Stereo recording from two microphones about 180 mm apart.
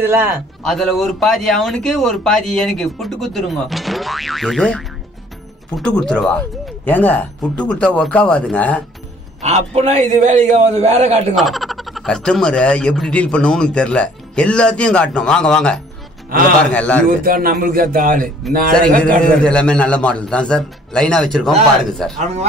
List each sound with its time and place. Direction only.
0.0 s a man's voice: 15° right (ahead or behind)
0.7 s speech: centre (ahead or behind)
9.4 s a man's voice: 40° right (ahead or behind)
11.3 s speech: centre (ahead or behind)
16.3 s a man's voice: 50° right (ahead or behind)
16.7 s speech: 5° left (ahead or behind)
17.2 s speech: 55° right (ahead or behind)
18.9 s speech: 5° left (ahead or behind)
22.2 s a man's voice: 35° right (ahead or behind)